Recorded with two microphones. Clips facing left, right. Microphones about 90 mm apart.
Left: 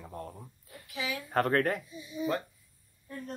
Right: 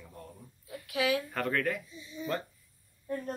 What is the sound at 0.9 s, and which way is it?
Speech, 70° right (ahead or behind).